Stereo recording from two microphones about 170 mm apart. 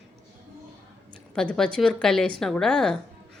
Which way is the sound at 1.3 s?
5° left (ahead or behind).